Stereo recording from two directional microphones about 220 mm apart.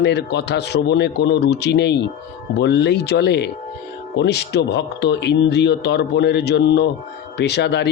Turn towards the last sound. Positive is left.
turn(degrees=50)  # may be behind; listen again after turning